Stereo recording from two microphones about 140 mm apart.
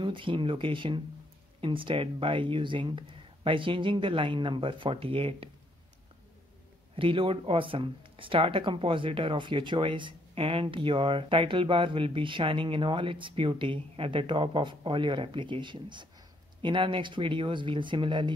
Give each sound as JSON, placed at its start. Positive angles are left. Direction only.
{"t": 0.0, "sound": "speech", "side_deg": -35}
{"t": 7.0, "sound": "speech", "side_deg": -40}